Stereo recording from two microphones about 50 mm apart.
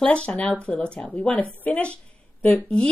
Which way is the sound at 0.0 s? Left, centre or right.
Left.